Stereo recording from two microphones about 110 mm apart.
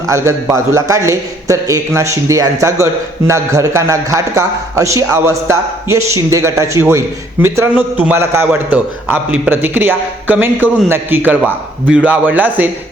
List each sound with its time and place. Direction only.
0.1 s a man's voice: 25° right (ahead or behind)